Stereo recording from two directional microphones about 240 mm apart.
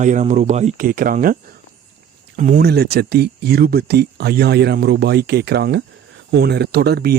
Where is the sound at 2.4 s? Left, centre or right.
Right.